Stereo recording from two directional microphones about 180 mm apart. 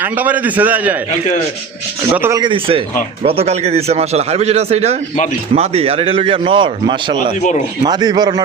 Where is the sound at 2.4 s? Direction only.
30° right (ahead or behind).